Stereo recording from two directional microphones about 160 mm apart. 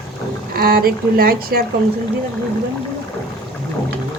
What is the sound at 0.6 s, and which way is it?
A woman's voice, 70° right (ahead or behind).